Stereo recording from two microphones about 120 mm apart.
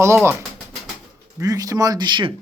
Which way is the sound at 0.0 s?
20° right (ahead or behind).